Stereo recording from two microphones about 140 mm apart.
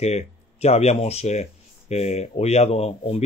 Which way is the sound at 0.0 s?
50° left (ahead or behind).